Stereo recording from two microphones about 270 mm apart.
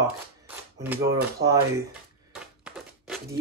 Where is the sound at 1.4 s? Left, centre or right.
Right.